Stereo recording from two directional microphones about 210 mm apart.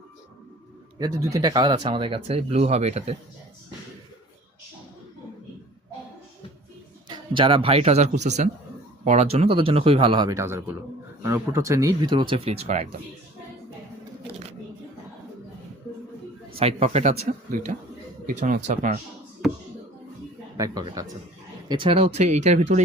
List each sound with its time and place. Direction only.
0.9 s speech: 15° right (ahead or behind)
7.1 s speech: 25° right (ahead or behind)
16.6 s speech: 30° right (ahead or behind)
20.8 s speech: 20° right (ahead or behind); by 22.8 s 35° right (ahead or behind)